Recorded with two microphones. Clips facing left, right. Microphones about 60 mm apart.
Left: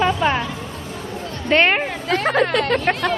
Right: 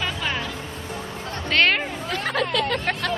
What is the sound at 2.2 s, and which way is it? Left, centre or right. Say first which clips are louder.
Speech: left 7 dB; left.